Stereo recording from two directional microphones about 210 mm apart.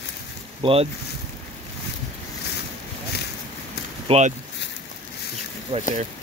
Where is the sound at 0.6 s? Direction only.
25° right (ahead or behind).